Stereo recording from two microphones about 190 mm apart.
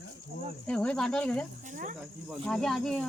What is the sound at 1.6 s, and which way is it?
Cricket, 45° right (ahead or behind).